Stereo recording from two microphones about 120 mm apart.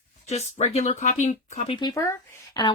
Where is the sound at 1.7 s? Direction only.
40° left (ahead or behind).